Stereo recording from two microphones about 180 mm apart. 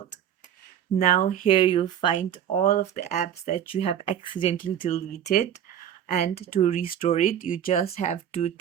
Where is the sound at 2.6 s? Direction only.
50° left (ahead or behind); by 4.5 s 30° left (ahead or behind).